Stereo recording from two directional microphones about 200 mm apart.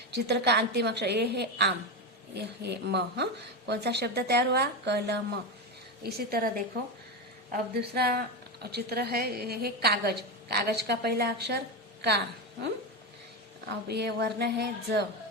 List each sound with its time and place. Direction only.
0.1 s a woman's voice: 55° right (ahead or behind)
7.5 s a woman's voice: 50° right (ahead or behind)
13.7 s speech: 55° right (ahead or behind)